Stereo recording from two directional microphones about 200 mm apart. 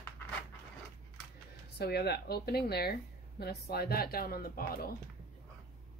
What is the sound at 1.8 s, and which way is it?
Speech, 55° left (ahead or behind).